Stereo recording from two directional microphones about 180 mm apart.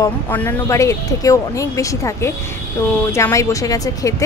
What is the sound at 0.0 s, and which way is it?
Speech, 10° left (ahead or behind).